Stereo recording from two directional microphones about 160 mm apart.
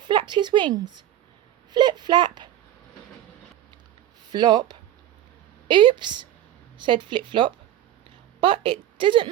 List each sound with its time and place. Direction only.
0.0 s a woman's voice: 30° right (ahead or behind)
1.7 s a sound: 25° right (ahead or behind)
4.3 s a woman's voice: 25° right (ahead or behind)